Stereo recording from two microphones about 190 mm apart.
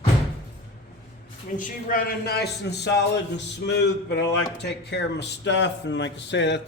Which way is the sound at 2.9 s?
65° left (ahead or behind).